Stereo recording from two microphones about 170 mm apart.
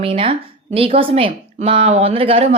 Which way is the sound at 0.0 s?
35° right (ahead or behind).